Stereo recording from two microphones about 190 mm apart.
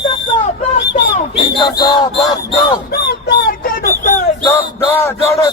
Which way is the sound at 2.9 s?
55° left (ahead or behind).